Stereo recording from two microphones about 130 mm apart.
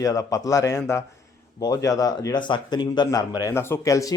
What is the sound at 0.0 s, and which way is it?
A man's voice, 25° left (ahead or behind).